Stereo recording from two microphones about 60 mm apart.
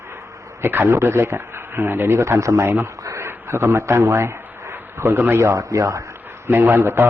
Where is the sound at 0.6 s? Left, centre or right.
Right.